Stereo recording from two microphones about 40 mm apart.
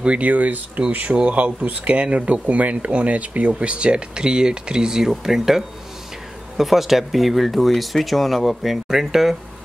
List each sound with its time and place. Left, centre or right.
0.0 s speech: right
0.3 s speech: right; by 9.4 s centre